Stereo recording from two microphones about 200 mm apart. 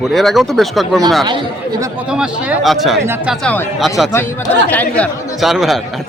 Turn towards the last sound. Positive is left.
turn(degrees=0)  # may be behind; listen again after turning